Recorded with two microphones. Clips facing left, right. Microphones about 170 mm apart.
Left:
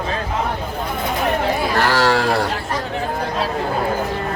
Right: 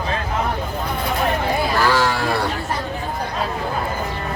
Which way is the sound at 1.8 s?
75° left (ahead or behind).